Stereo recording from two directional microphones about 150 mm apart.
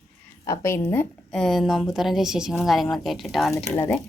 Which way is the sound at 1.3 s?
Centre (ahead or behind).